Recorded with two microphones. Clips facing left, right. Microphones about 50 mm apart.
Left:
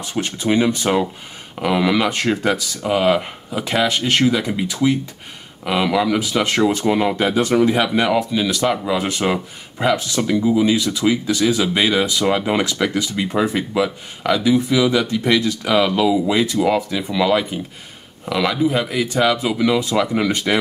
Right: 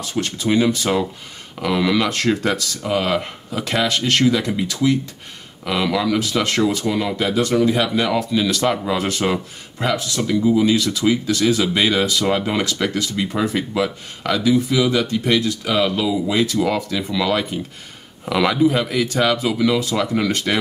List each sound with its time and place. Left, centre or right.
0.0 s speech: centre
14.4 s speech: centre
14.8 s speech: centre
18.2 s speech: centre